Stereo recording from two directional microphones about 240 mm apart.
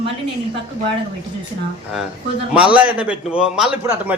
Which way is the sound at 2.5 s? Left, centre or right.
Centre.